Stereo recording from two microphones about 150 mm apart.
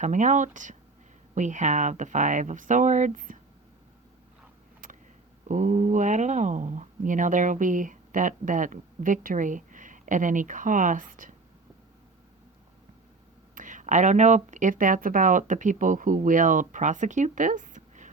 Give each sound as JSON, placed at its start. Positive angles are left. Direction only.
{"t": 0.0, "sound": "speech", "side_deg": -55}
{"t": 5.5, "sound": "speech", "side_deg": -55}
{"t": 13.6, "sound": "speech", "side_deg": -60}